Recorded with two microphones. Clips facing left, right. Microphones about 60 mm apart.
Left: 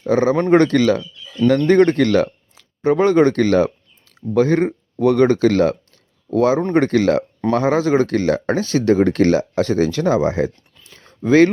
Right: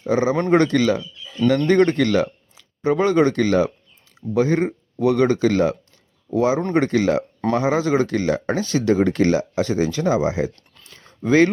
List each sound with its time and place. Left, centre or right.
0.1 s speech: left